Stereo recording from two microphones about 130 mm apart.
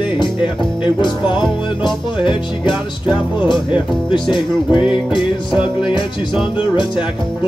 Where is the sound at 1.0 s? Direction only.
35° left (ahead or behind).